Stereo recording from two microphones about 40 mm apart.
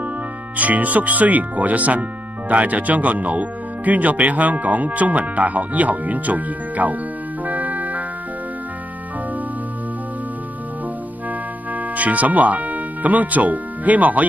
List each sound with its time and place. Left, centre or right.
0.6 s speech: right
7.4 s organ: right
11.7 s speech: right